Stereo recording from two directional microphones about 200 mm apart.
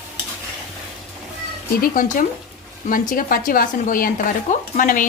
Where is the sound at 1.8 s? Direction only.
45° left (ahead or behind).